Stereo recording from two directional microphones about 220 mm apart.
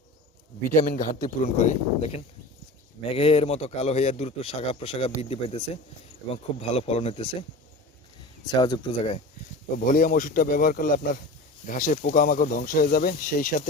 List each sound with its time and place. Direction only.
0.9 s a man's voice: 35° left (ahead or behind)
8.4 s a man's voice: 20° left (ahead or behind)
9.7 s speech: 40° left (ahead or behind)